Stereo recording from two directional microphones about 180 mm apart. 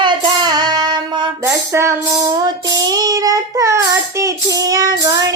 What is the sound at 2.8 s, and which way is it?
Child singing, 20° right (ahead or behind).